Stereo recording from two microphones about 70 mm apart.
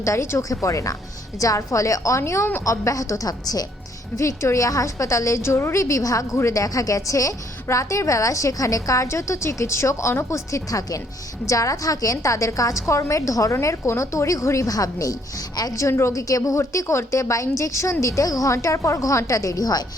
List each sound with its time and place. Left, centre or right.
0.0 s a woman's voice: left
4.2 s a woman's voice: left